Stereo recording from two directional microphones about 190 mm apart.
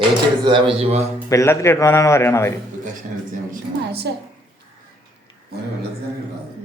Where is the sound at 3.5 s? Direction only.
55° right (ahead or behind).